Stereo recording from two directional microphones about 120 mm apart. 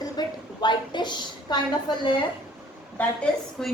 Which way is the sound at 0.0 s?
35° left (ahead or behind).